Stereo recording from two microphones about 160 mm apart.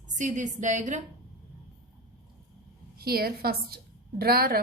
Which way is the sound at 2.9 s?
70° right (ahead or behind).